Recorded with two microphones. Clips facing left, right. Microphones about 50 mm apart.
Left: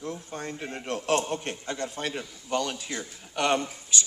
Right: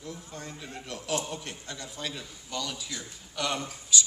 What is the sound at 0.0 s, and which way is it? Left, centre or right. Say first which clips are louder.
A man's voice: left 6 dB; left.